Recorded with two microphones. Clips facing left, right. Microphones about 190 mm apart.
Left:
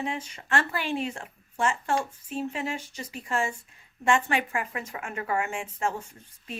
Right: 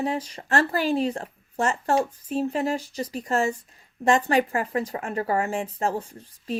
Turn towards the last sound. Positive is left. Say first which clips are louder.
# right 10 dB
turn(degrees=-35)  # may be behind; listen again after turning